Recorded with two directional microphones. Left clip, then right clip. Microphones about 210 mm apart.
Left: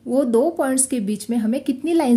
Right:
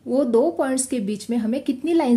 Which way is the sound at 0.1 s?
15° left (ahead or behind).